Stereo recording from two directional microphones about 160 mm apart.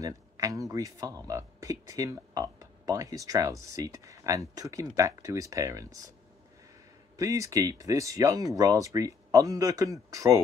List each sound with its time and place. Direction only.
0.0 s speech: 20° right (ahead or behind)
7.2 s speech: 20° right (ahead or behind)